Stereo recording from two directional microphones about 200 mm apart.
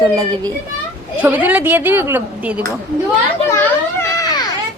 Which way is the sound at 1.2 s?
10° right (ahead or behind).